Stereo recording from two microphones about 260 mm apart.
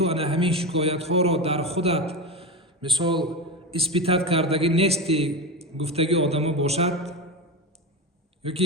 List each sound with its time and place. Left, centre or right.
0.0 s a man's voice: right
2.2 s a sound: right
3.7 s a man's voice: right
8.4 s speech: right